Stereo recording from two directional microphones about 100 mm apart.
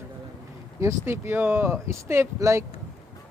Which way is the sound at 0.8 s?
25° right (ahead or behind).